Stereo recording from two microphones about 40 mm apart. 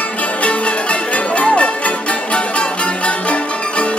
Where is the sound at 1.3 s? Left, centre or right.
Left.